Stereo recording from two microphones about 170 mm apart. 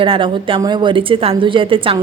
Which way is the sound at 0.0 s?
30° right (ahead or behind).